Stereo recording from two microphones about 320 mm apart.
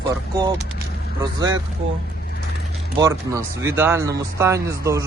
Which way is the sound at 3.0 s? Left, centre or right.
Centre.